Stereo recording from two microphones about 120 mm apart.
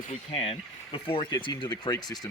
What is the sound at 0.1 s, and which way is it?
Speech, 55° left (ahead or behind).